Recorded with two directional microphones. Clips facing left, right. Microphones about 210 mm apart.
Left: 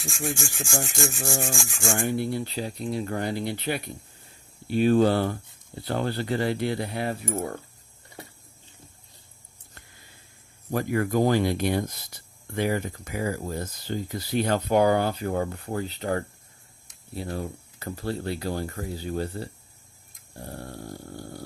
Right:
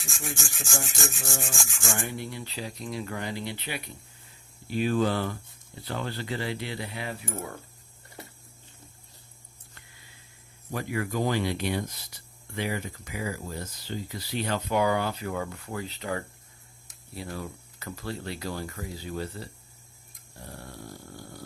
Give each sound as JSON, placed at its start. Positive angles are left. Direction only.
{"t": 0.3, "sound": "rub", "side_deg": 15}
{"t": 1.5, "sound": "speech", "side_deg": 30}
{"t": 10.7, "sound": "speech", "side_deg": 45}